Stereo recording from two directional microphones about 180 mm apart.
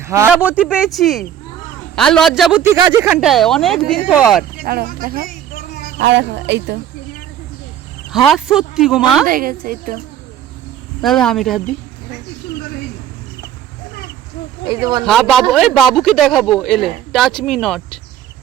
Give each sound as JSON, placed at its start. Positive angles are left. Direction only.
{"t": 0.0, "sound": "speech", "side_deg": -15}
{"t": 2.6, "sound": "speech", "side_deg": -15}
{"t": 3.2, "sound": "speech", "side_deg": 0}
{"t": 4.6, "sound": "speech", "side_deg": -55}
{"t": 6.0, "sound": "speech", "side_deg": -75}
{"t": 8.1, "sound": "speech", "side_deg": 0}
{"t": 9.2, "sound": "speech", "side_deg": -55}
{"t": 11.0, "sound": "speech", "side_deg": 0}
{"t": 14.7, "sound": "speech", "side_deg": -20}
{"t": 15.0, "sound": "speech", "side_deg": 0}